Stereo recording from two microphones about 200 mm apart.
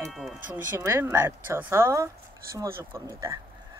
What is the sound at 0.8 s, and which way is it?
Speech, 15° right (ahead or behind).